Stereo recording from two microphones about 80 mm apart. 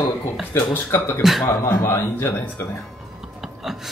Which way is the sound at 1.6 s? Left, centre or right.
Left.